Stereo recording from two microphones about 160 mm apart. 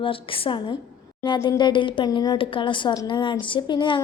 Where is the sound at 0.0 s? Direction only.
35° left (ahead or behind).